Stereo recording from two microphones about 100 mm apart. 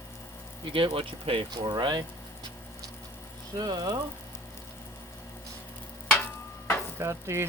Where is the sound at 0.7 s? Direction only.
65° right (ahead or behind).